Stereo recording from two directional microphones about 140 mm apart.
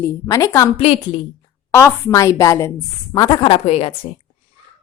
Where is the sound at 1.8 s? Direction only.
20° left (ahead or behind).